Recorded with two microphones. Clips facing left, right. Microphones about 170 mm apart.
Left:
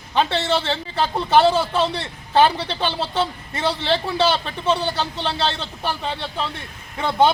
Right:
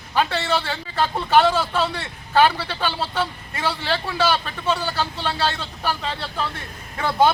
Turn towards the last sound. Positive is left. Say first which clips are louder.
# left 1 dB
turn(degrees=20)  # may be behind; listen again after turning